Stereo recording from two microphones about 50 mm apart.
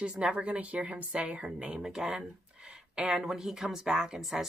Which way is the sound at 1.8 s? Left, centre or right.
Centre.